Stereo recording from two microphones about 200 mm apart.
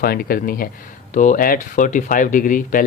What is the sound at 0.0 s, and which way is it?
Speech, 45° left (ahead or behind).